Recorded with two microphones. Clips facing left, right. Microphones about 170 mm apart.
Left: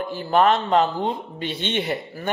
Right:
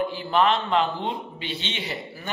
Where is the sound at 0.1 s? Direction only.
45° left (ahead or behind).